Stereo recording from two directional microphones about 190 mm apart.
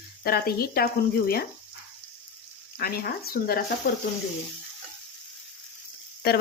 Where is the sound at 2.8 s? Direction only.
55° left (ahead or behind).